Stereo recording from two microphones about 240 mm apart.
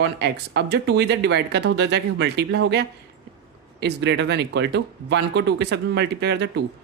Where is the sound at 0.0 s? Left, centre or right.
Right.